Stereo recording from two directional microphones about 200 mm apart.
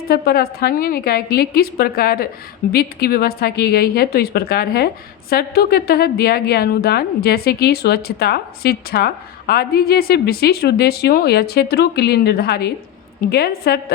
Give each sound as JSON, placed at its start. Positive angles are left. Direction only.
{"t": 0.1, "sound": "a woman's voice", "side_deg": 50}